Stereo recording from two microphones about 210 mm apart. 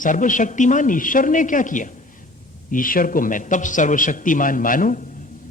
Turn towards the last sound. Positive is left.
turn(degrees=40)  # may be behind; listen again after turning